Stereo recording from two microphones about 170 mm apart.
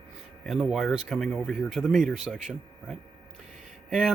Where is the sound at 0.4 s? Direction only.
Centre (ahead or behind).